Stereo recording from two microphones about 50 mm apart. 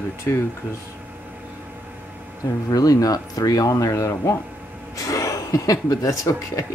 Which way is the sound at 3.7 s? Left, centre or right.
Left.